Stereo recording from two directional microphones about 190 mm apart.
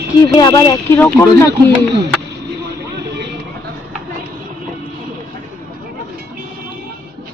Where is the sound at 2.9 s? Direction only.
60° right (ahead or behind).